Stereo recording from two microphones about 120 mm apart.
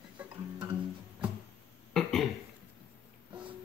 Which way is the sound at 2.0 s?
5° left (ahead or behind).